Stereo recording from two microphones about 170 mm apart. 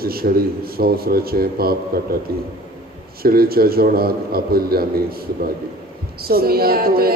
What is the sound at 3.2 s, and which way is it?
A man's voice, 60° right (ahead or behind).